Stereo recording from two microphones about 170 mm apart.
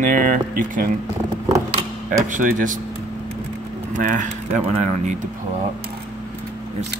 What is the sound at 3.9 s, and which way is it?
Speech, 50° right (ahead or behind).